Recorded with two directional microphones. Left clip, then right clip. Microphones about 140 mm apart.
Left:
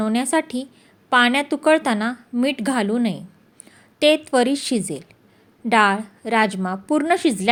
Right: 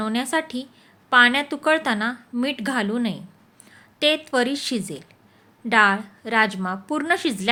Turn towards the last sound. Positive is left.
turn(degrees=20)  # may be behind; listen again after turning